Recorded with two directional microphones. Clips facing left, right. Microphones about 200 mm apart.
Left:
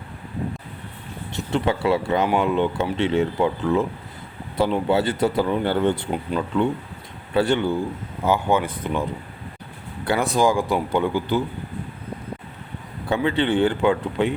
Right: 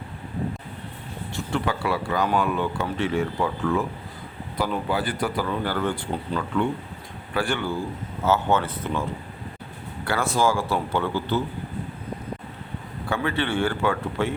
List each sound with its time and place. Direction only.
1.3 s a man's voice: 20° left (ahead or behind)
13.1 s speech: 20° left (ahead or behind)